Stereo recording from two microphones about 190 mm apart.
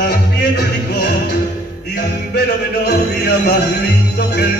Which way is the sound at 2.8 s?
60° left (ahead or behind).